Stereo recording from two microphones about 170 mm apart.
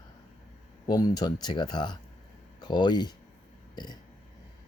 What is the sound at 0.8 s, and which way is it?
Speech, 25° left (ahead or behind).